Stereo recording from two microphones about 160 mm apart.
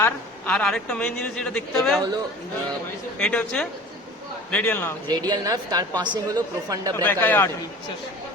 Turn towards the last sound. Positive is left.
turn(degrees=10)  # may be behind; listen again after turning